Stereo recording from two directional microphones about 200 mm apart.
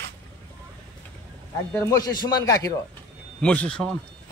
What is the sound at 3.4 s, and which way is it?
Speech, 5° left (ahead or behind).